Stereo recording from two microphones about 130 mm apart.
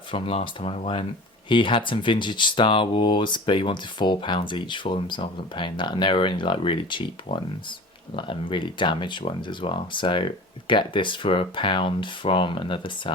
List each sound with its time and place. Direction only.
0.1 s speech: 45° left (ahead or behind)